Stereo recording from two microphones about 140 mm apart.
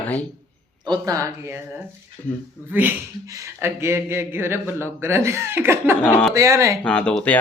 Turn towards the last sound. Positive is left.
turn(degrees=5)  # may be behind; listen again after turning